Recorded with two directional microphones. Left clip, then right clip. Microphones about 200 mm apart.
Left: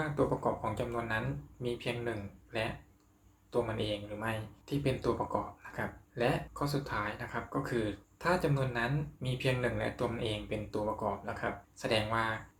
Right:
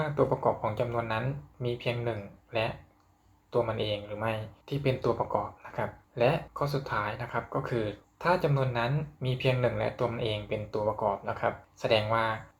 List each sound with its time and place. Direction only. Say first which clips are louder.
0.3 s speech: right 5 dB; 5° right (ahead or behind)